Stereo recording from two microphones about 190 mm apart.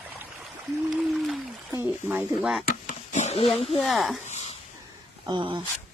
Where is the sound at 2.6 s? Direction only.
45° left (ahead or behind).